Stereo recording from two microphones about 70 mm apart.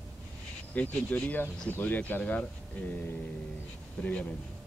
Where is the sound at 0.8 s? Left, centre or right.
Left.